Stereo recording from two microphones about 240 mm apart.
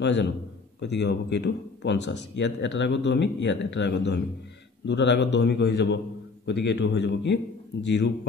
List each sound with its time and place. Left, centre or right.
0.0 s speech: left